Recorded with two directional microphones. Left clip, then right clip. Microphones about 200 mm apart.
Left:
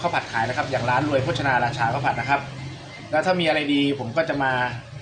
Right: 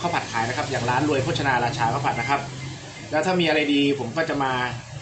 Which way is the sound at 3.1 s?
15° left (ahead or behind).